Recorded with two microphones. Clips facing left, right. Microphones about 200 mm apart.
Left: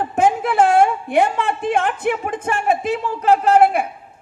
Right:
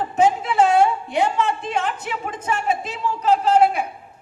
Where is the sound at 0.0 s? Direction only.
55° left (ahead or behind).